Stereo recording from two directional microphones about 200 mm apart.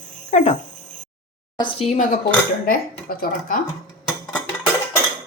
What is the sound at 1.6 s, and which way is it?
A woman's voice, 25° left (ahead or behind).